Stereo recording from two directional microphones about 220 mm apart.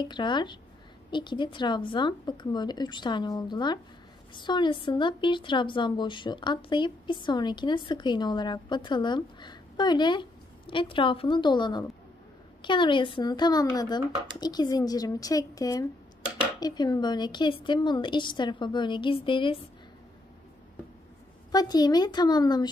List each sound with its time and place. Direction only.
0.0 s a woman's voice: 20° left (ahead or behind)
21.5 s a woman's voice: 20° left (ahead or behind)